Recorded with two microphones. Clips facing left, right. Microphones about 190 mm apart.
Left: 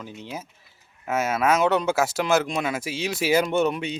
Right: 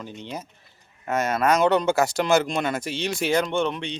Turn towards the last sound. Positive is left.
turn(degrees=5)  # may be behind; listen again after turning